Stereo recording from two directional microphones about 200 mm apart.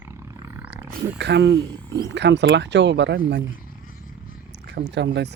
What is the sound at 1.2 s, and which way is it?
Speech, 60° right (ahead or behind).